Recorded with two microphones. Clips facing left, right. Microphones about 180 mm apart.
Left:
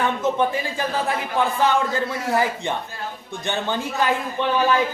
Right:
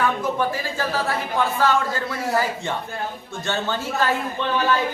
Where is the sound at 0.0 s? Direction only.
20° left (ahead or behind).